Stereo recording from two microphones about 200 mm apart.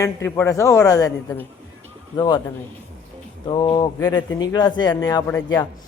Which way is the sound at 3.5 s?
25° left (ahead or behind).